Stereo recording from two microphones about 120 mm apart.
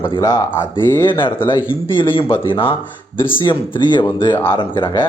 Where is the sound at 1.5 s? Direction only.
45° left (ahead or behind).